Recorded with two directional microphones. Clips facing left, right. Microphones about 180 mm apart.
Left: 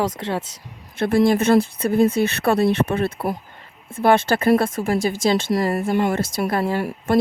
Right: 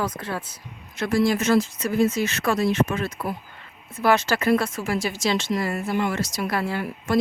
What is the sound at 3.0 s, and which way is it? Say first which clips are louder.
Speech: left 5 dB; 35° left (ahead or behind).